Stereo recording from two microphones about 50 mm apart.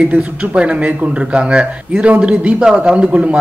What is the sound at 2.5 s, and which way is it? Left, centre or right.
Speech, centre.